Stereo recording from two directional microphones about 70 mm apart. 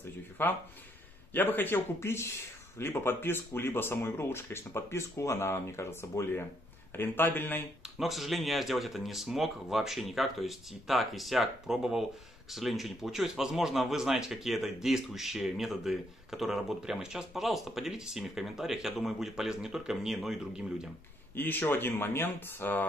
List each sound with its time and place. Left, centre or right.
0.4 s a man's voice: left
8.0 s speech: centre
21.4 s speech: left